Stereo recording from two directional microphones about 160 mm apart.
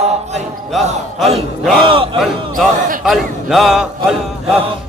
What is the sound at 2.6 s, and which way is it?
A man's voice, centre (ahead or behind).